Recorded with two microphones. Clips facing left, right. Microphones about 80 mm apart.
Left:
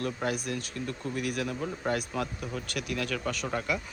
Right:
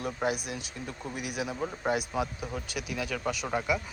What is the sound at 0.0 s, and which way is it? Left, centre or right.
Speech, centre.